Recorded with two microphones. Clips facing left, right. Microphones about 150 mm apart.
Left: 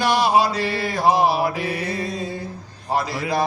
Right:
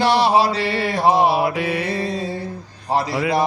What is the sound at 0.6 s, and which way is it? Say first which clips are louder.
Mantra: right 2 dB; 75° right (ahead or behind).